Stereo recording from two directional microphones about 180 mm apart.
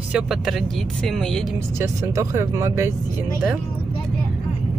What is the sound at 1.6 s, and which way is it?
Speech, 15° right (ahead or behind).